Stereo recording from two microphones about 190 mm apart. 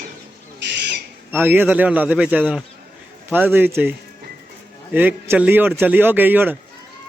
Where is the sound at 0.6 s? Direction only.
65° right (ahead or behind).